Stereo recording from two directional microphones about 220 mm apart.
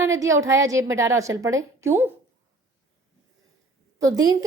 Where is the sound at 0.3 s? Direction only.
15° right (ahead or behind).